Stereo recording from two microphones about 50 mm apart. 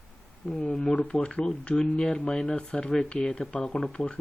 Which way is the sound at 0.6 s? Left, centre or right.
Left.